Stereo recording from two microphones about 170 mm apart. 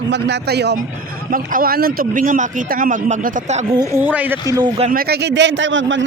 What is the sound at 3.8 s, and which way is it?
Speech, 15° right (ahead or behind).